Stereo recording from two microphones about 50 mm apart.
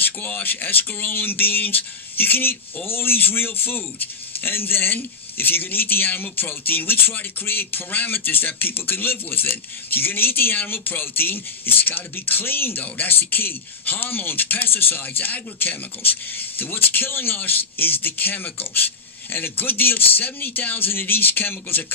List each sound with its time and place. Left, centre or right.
0.0 s speech: left